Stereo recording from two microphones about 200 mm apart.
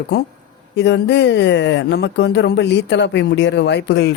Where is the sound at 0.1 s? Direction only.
55° left (ahead or behind).